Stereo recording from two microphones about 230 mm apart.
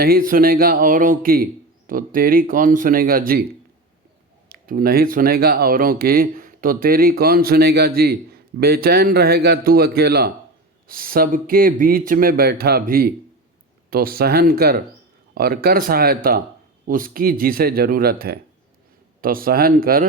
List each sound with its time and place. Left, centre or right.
0.0 s speech: right
4.4 s speech: right